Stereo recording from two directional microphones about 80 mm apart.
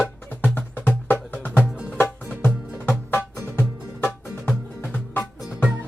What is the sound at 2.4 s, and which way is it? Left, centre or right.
Music, left.